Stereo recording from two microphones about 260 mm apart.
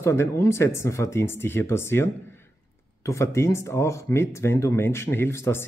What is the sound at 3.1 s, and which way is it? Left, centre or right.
Speech, centre.